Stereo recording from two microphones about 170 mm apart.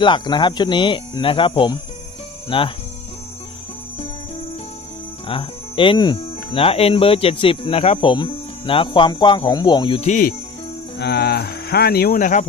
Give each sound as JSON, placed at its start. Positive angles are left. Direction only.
{"t": 0.0, "sound": "speech", "side_deg": 25}
{"t": 5.3, "sound": "speech", "side_deg": 30}
{"t": 11.0, "sound": "speech", "side_deg": 70}